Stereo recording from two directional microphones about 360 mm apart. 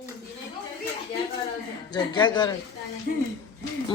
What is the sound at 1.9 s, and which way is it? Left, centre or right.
Speech, centre.